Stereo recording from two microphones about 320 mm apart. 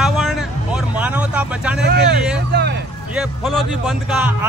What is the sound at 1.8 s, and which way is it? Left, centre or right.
Vehicle, right.